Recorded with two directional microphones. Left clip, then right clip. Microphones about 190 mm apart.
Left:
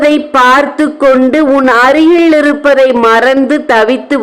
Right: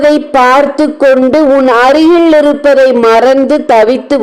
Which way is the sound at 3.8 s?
10° right (ahead or behind).